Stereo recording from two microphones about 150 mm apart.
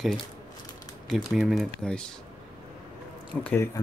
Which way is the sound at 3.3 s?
10° left (ahead or behind).